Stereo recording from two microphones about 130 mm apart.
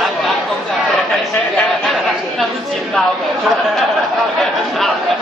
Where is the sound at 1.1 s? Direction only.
5° left (ahead or behind).